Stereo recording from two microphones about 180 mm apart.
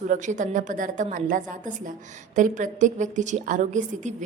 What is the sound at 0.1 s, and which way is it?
A woman's voice, 45° right (ahead or behind).